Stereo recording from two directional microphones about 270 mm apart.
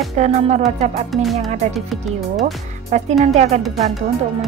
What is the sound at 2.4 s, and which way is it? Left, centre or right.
Speech, right.